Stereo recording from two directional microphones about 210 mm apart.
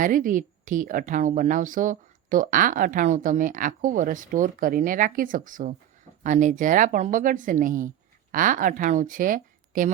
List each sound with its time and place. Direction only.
0.0 s a woman's voice: 40° right (ahead or behind)